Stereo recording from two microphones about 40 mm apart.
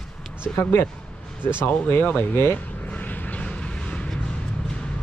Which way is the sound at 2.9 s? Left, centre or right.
Left.